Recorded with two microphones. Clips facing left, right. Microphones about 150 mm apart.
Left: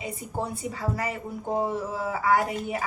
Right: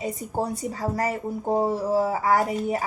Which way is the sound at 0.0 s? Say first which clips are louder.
Right 4 dB; 40° right (ahead or behind).